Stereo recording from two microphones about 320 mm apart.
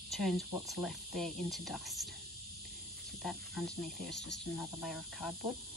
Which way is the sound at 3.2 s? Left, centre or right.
Centre.